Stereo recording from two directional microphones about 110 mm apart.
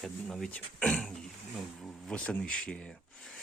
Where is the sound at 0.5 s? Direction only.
10° left (ahead or behind).